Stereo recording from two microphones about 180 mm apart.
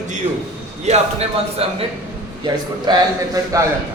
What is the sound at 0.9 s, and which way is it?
Speech, 35° right (ahead or behind).